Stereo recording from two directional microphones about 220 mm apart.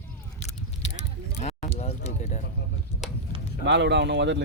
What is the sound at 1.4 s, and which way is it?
Speech, 30° left (ahead or behind).